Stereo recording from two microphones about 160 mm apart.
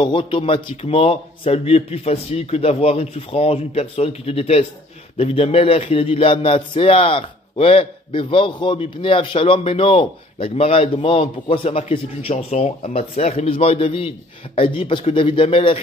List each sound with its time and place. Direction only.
0.0 s speech: 35° left (ahead or behind)